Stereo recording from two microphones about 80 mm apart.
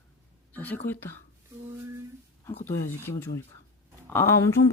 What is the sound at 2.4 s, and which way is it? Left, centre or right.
Speech, left.